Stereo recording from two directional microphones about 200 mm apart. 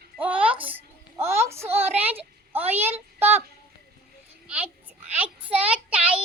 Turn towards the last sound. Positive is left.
turn(degrees=-5)  # may be behind; listen again after turning